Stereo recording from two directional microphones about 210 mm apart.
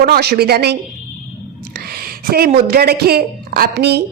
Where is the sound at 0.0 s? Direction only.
50° right (ahead or behind).